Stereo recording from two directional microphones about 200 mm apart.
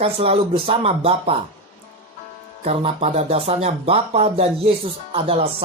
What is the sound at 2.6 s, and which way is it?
Speech, 30° right (ahead or behind).